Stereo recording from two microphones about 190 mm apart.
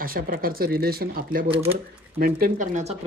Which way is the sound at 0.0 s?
50° right (ahead or behind).